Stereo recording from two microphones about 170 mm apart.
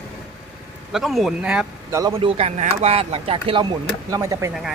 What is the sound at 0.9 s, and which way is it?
Speech, centre (ahead or behind).